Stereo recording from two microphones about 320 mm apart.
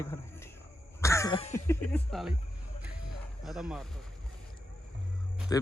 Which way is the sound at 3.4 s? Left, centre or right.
Centre.